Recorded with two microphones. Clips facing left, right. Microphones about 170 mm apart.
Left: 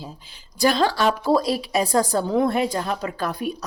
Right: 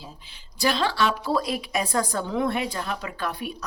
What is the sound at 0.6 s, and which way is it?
A woman's voice, 45° left (ahead or behind).